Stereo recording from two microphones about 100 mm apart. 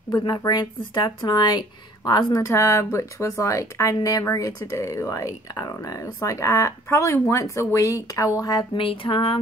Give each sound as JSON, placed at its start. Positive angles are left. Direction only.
{"t": 0.3, "sound": "speech", "side_deg": 40}
{"t": 8.7, "sound": "music", "side_deg": 65}